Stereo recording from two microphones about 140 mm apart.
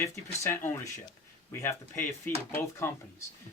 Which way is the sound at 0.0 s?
20° left (ahead or behind).